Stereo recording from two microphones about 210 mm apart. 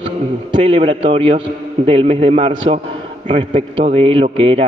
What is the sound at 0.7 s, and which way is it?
A man's voice, 25° right (ahead or behind).